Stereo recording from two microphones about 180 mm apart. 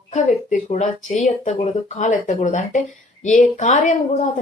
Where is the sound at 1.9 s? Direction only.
40° left (ahead or behind).